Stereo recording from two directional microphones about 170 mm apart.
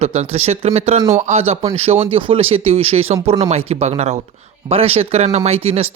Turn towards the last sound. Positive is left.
turn(degrees=-35)  # may be behind; listen again after turning